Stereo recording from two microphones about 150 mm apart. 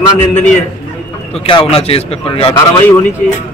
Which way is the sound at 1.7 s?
40° left (ahead or behind).